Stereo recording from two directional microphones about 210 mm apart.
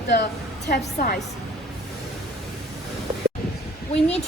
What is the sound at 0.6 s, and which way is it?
Speech, 45° left (ahead or behind).